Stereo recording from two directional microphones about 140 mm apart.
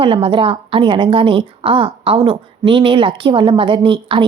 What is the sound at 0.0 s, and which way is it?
A woman's voice, 40° right (ahead or behind).